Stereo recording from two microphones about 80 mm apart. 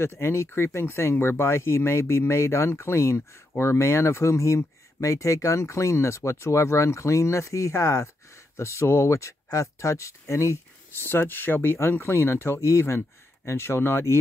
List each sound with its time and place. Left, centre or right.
0.0 s speech: left